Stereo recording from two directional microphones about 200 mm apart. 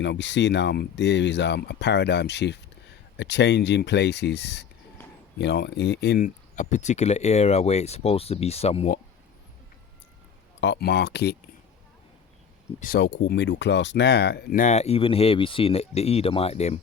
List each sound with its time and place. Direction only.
0.0 s speech: 65° left (ahead or behind); by 9.0 s 30° left (ahead or behind)
10.6 s speech: 60° left (ahead or behind)
12.8 s speech: 50° left (ahead or behind)
13.1 s speech: 60° left (ahead or behind)
14.6 s speech: 35° left (ahead or behind)